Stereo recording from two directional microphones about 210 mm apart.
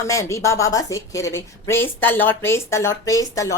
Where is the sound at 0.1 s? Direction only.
15° left (ahead or behind).